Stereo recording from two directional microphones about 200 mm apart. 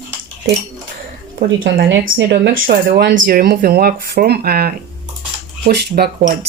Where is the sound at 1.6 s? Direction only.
50° right (ahead or behind).